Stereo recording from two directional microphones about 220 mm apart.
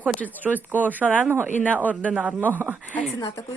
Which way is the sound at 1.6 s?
5° left (ahead or behind).